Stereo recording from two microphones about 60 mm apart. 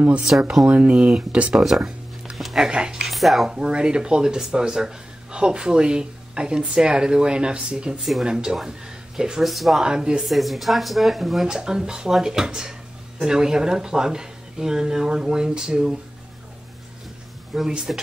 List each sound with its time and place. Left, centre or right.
0.7 s speech: right
3.0 s speech: centre
3.5 s speech: centre
9.8 s speech: centre
10.2 s speech: centre
17.6 s speech: centre